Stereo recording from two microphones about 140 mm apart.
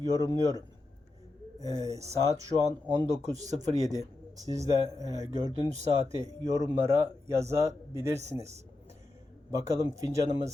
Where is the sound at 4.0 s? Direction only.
25° right (ahead or behind).